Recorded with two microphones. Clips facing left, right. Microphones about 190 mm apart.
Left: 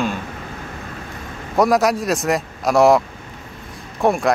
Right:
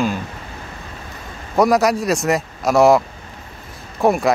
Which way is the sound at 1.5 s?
Centre (ahead or behind).